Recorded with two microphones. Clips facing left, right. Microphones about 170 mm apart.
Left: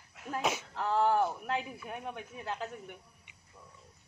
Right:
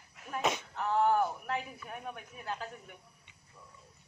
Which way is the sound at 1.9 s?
25° left (ahead or behind).